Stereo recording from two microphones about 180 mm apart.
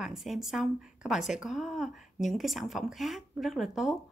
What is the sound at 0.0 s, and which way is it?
Speech, centre (ahead or behind).